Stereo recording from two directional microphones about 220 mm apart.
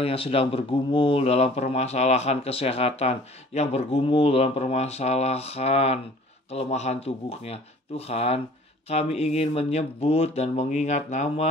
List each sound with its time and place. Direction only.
0.0 s speech: 25° left (ahead or behind)